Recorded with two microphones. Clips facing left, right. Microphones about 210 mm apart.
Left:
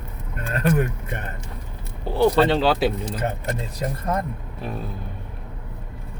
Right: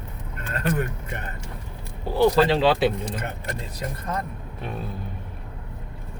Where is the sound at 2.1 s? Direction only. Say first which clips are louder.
Left 1 dB; centre (ahead or behind).